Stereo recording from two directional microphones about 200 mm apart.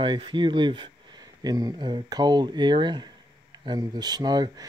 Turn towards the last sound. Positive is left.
turn(degrees=-20)  # may be behind; listen again after turning